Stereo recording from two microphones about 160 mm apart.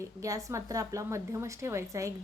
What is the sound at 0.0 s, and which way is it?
A woman's voice, 20° right (ahead or behind).